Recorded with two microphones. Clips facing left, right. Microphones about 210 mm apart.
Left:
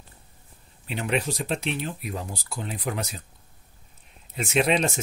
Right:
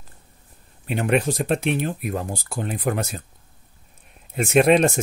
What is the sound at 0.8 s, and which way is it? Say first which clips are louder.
Speech: right 6 dB; 50° right (ahead or behind).